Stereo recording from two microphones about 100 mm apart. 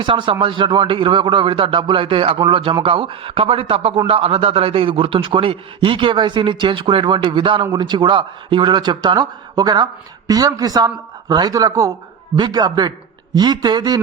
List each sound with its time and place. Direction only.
0.0 s a man's voice: 55° right (ahead or behind)